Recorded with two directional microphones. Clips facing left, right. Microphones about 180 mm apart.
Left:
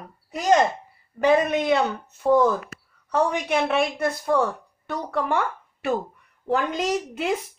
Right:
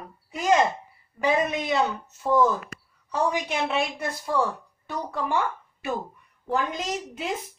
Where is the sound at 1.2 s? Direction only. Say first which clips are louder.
Left 5 dB; 60° left (ahead or behind).